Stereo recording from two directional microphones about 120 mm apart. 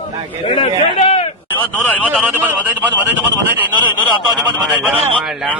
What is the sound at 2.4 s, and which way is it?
Speech, 15° right (ahead or behind).